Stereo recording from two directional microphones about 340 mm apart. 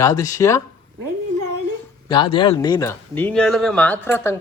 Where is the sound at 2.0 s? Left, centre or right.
Centre.